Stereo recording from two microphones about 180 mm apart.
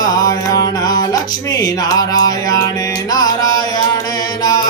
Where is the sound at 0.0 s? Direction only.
20° left (ahead or behind).